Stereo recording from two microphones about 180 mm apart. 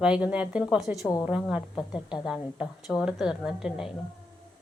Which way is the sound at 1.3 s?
5° right (ahead or behind).